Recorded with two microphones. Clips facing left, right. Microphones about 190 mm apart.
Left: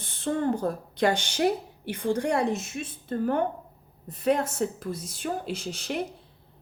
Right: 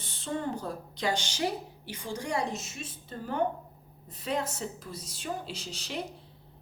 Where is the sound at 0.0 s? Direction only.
55° left (ahead or behind).